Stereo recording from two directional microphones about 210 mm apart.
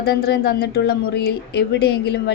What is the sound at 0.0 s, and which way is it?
Speech, 50° left (ahead or behind).